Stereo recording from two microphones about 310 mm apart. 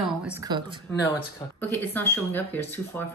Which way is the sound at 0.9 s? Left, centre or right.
Centre.